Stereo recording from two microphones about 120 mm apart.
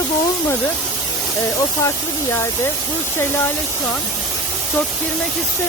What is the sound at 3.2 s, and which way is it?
Speech, 20° left (ahead or behind).